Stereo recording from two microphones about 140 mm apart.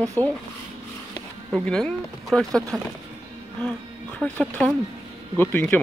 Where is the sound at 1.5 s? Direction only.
5° left (ahead or behind).